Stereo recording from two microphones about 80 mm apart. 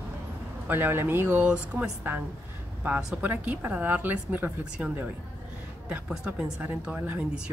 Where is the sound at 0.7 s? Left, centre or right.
Right.